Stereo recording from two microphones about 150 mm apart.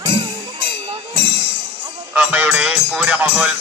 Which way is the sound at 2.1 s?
10° right (ahead or behind).